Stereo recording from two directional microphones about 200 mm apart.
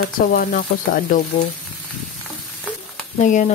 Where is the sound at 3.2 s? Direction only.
40° left (ahead or behind).